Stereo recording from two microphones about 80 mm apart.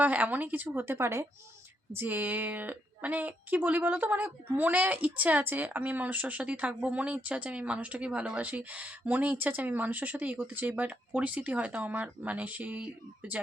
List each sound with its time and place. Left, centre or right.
0.0 s speech: centre
2.0 s speech: right